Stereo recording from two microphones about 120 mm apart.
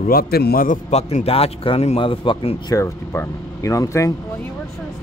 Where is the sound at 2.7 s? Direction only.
25° left (ahead or behind).